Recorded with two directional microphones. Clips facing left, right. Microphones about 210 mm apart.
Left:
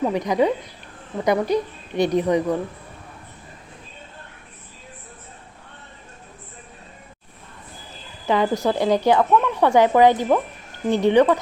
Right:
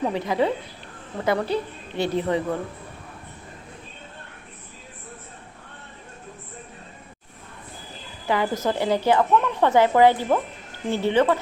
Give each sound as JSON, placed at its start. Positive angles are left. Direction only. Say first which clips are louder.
{"t": 0.1, "sound": "a woman's voice", "louder": "left 3 dB", "side_deg": 15}
{"t": 8.3, "sound": "a woman's voice", "louder": "left 3 dB", "side_deg": 15}